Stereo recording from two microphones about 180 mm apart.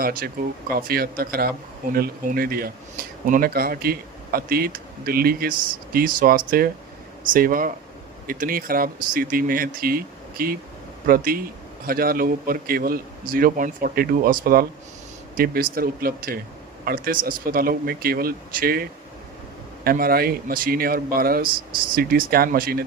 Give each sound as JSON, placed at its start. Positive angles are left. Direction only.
{"t": 0.0, "sound": "speech", "side_deg": -55}
{"t": 15.7, "sound": "speech", "side_deg": -55}